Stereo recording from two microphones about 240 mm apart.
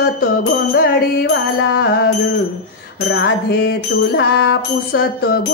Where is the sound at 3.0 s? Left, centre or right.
Left.